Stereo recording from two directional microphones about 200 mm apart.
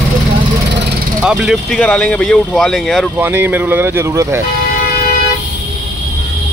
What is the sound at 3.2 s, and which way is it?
Speech, 10° right (ahead or behind).